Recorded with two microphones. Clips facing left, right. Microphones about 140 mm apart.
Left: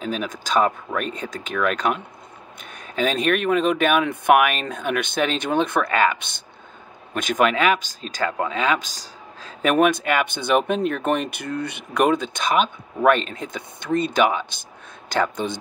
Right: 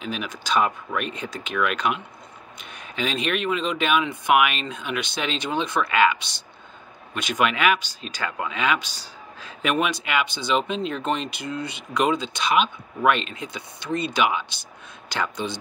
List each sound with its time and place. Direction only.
0.0 s speech: 40° left (ahead or behind)
3.0 s speech: 45° left (ahead or behind)